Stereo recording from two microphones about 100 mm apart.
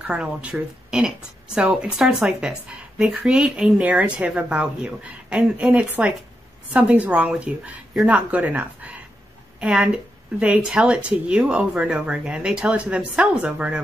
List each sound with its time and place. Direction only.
0.0 s a woman's voice: 10° right (ahead or behind)